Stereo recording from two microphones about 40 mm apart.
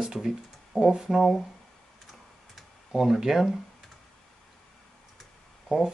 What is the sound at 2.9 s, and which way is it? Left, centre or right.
Speech, centre.